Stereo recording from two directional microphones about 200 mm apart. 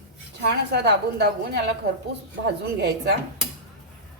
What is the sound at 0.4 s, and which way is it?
A woman's voice, 55° right (ahead or behind).